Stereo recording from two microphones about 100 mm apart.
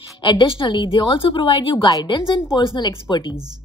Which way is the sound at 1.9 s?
45° left (ahead or behind).